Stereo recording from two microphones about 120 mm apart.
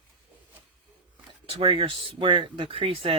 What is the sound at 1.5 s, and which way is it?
Speech, 50° right (ahead or behind).